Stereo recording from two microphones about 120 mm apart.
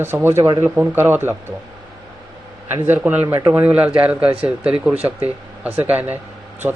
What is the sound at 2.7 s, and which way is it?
Speech, 15° right (ahead or behind).